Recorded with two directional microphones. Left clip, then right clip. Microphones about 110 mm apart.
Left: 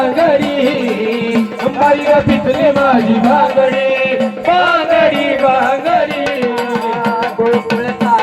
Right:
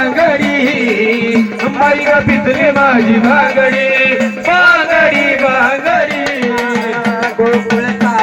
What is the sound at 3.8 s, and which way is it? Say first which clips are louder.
Music: right 2 dB; 30° left (ahead or behind).